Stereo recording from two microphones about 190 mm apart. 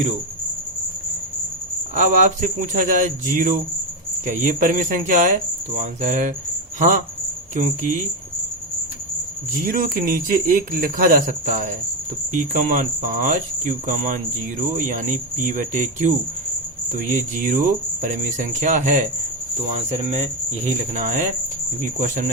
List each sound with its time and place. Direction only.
2.0 s speech: 40° right (ahead or behind)
9.5 s speech: 50° right (ahead or behind)
20.9 s speech: 40° right (ahead or behind)